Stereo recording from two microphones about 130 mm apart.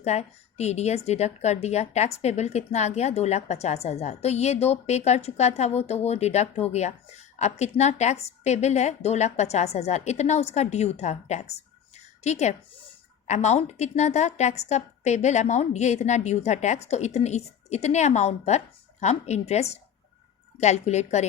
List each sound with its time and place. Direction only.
0.0 s speech: 60° left (ahead or behind)